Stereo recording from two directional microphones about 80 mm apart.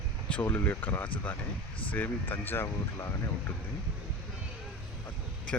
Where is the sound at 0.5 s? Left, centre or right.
Left.